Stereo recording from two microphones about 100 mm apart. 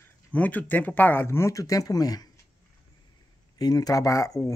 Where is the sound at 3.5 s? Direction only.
40° left (ahead or behind).